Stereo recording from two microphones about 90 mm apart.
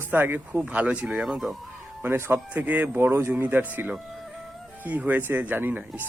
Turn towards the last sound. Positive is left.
turn(degrees=-15)  # may be behind; listen again after turning